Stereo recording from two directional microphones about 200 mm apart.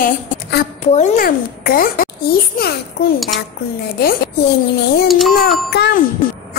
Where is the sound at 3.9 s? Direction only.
50° left (ahead or behind).